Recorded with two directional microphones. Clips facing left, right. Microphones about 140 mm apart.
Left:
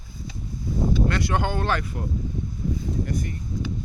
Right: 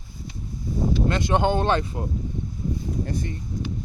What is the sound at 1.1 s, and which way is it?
Speech, 20° right (ahead or behind).